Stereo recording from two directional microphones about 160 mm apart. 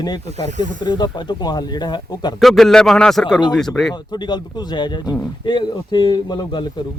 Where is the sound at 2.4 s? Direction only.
Centre (ahead or behind).